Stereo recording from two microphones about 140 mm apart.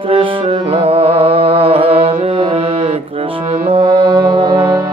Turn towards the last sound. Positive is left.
turn(degrees=-35)  # may be behind; listen again after turning